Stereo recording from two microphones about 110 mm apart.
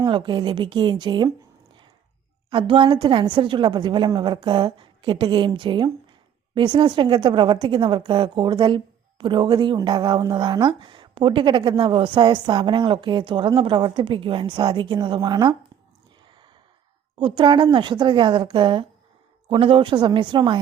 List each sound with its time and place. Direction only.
0.0 s a woman's voice: 45° right (ahead or behind)
2.5 s a woman's voice: 50° right (ahead or behind)
17.2 s a woman's voice: 45° right (ahead or behind)